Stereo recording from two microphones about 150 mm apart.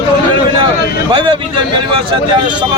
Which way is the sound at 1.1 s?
30° right (ahead or behind).